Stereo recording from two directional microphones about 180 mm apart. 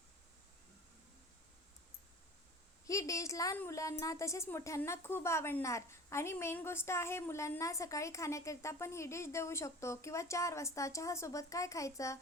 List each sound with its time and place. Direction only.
2.8 s a woman's voice: 20° left (ahead or behind)